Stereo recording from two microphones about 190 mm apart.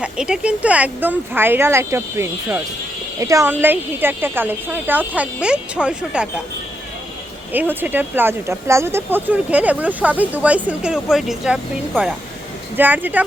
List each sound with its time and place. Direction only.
0.0 s speech: 5° right (ahead or behind)
7.5 s speech: 10° right (ahead or behind)